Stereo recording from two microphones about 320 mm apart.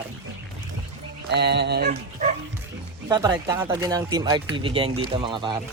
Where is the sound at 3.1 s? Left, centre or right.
Centre.